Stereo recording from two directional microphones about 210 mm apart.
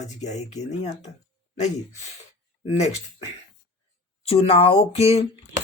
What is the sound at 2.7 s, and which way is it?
Speech, 30° left (ahead or behind).